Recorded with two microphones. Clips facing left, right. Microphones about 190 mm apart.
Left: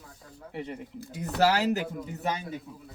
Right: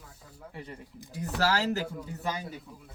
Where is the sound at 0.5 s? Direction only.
20° left (ahead or behind).